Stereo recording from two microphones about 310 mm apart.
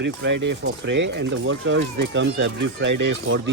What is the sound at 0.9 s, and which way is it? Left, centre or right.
Speech, right.